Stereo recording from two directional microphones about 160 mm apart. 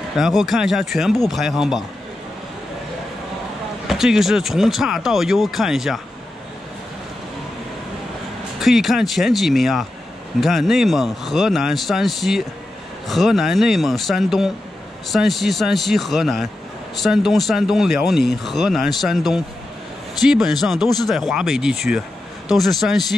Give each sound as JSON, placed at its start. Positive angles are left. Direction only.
{"t": 0.1, "sound": "speech", "side_deg": 0}
{"t": 3.8, "sound": "speech", "side_deg": 0}
{"t": 8.5, "sound": "speech", "side_deg": 0}